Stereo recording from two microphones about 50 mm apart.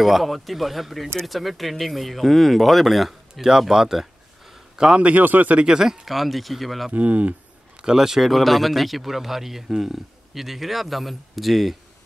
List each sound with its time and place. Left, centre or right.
0.0 s a man's voice: centre
5.0 s speech: right
5.6 s a man's voice: centre
6.9 s speech: right
7.8 s a man's voice: centre